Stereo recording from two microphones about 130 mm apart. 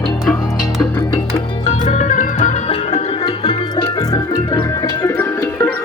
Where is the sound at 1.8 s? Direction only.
70° left (ahead or behind).